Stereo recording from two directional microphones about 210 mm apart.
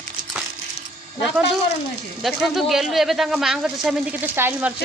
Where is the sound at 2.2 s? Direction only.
Centre (ahead or behind).